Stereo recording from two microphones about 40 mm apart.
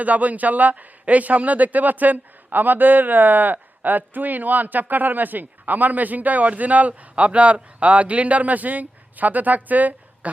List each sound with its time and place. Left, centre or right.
0.0 s a man's voice: right